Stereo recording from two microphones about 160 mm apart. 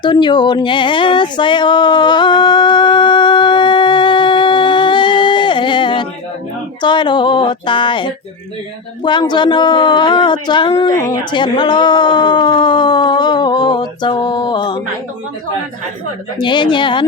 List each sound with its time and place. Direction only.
0.0 s a sound: 30° left (ahead or behind)
6.8 s speech: 30° left (ahead or behind)
16.4 s speech: 30° left (ahead or behind)